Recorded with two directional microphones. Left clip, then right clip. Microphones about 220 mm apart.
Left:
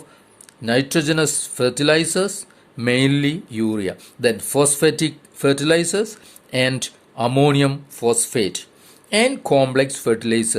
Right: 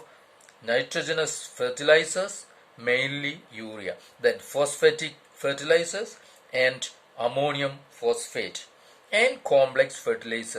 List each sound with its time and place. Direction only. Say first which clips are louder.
0.6 s speech: left 7 dB; 45° left (ahead or behind)